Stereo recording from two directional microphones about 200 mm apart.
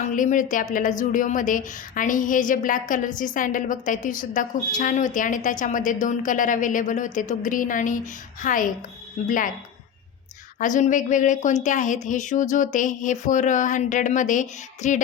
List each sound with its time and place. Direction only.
0.2 s a woman's voice: 40° left (ahead or behind)
10.6 s a woman's voice: 40° left (ahead or behind)